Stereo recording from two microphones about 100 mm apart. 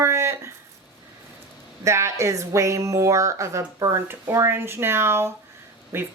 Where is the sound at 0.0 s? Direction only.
25° right (ahead or behind).